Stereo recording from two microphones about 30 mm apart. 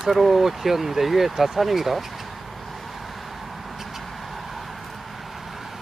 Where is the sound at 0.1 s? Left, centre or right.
Centre.